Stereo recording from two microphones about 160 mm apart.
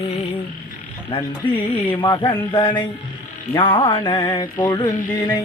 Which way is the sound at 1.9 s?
25° left (ahead or behind).